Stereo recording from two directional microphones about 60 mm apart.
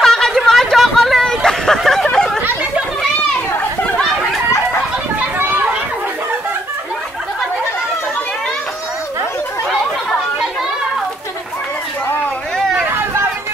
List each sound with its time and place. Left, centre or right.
0.0 s a sound: centre
0.5 s hubbub: centre
2.0 s chatter: centre